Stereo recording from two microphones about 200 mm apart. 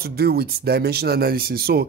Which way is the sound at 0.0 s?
50° right (ahead or behind).